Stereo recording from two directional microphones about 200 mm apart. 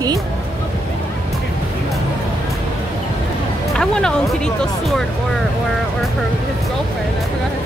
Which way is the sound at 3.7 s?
5° left (ahead or behind).